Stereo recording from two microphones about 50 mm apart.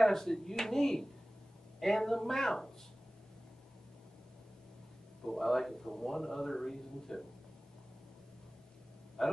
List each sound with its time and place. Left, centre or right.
0.0 s a man's voice: centre
5.2 s a man's voice: centre
9.2 s a man's voice: centre